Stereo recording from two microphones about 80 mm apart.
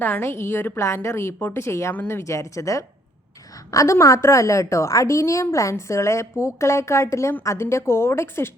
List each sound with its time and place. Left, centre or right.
0.0 s a woman's voice: left